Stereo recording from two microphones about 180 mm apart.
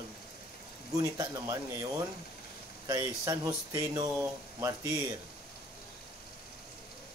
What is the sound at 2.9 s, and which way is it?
Speech, 20° right (ahead or behind).